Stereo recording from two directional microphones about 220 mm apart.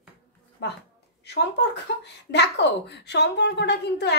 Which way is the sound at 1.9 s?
50° left (ahead or behind).